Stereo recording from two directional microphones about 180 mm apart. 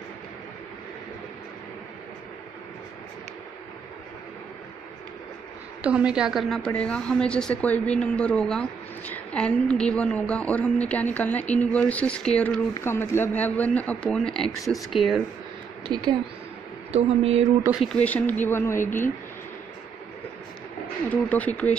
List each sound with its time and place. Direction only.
5.8 s a woman's voice: 5° right (ahead or behind)
15.9 s speech: 20° right (ahead or behind)
16.9 s speech: 35° right (ahead or behind)
17.6 s speech: centre (ahead or behind)
21.1 s speech: 10° left (ahead or behind)